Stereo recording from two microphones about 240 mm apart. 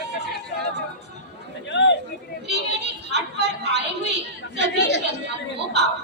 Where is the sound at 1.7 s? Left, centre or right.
Left.